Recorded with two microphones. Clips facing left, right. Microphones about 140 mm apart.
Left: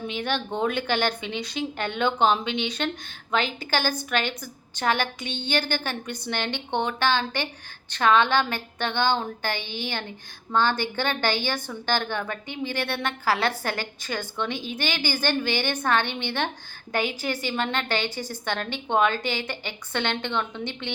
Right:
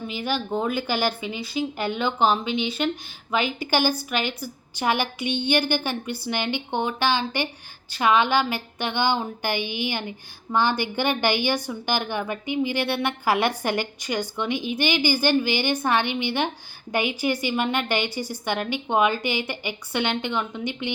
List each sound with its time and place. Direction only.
0.1 s a woman's voice: 5° right (ahead or behind)